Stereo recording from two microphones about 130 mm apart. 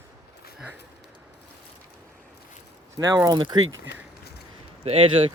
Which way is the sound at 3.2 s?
35° right (ahead or behind).